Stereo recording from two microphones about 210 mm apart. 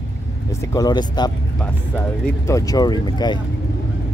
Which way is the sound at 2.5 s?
15° left (ahead or behind).